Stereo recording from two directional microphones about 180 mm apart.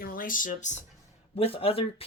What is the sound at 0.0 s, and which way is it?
Speech, 50° left (ahead or behind).